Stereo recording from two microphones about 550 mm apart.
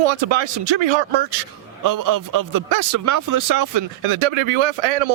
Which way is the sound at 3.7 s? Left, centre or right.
Right.